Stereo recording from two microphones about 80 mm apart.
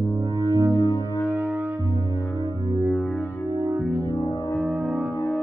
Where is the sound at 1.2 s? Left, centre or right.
Right.